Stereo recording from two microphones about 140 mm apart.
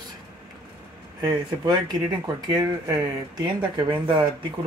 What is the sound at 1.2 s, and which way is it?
Speech, 30° right (ahead or behind).